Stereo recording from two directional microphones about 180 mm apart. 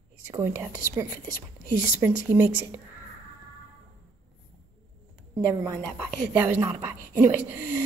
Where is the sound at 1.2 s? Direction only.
50° right (ahead or behind).